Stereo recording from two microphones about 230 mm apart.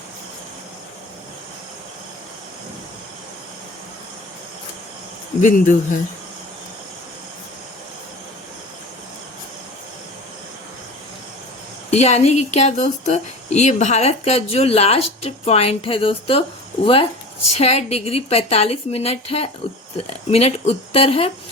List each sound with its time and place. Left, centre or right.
5.4 s speech: left
11.9 s speech: left